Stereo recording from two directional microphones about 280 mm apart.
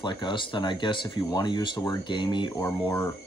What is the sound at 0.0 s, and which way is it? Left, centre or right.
Speech, centre.